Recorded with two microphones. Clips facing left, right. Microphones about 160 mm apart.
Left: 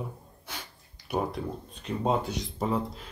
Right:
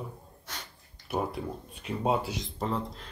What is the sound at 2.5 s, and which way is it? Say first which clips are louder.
Speech: left 3 dB; 5° left (ahead or behind).